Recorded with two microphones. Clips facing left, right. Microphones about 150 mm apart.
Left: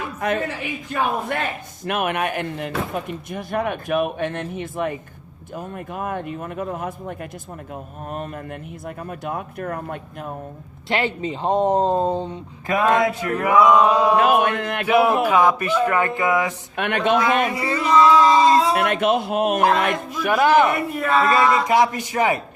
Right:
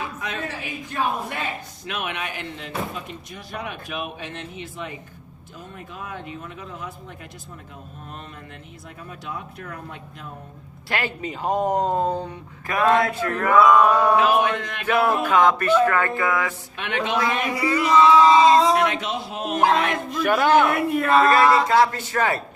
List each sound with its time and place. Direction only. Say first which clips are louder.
0.2 s a man's voice: left 7 dB; 55° left (ahead or behind)
10.8 s speech: left 5 dB; 25° left (ahead or behind)
14.2 s speech: left 2 dB; 55° left (ahead or behind)
14.8 s speech: left 3 dB; 10° left (ahead or behind)
16.7 s speech: left 6 dB; 60° left (ahead or behind)
17.5 s speech: right 1 dB; 30° left (ahead or behind)
18.9 s speech: left 8 dB; 60° left (ahead or behind)
19.9 s speech: left 2 dB; centre (ahead or behind)
20.2 s speech: left 1 dB; 10° left (ahead or behind)
20.6 s speech: left 1 dB; centre (ahead or behind)
21.7 s speech: left 1 dB; 15° left (ahead or behind)